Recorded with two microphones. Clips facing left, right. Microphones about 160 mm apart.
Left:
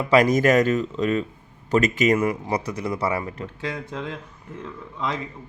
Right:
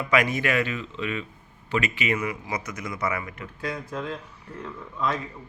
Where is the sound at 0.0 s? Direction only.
35° left (ahead or behind).